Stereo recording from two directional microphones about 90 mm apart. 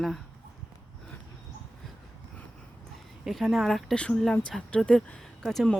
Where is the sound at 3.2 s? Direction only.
Centre (ahead or behind).